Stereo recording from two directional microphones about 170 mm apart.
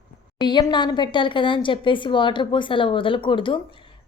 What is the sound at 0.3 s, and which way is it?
Speech, 25° left (ahead or behind).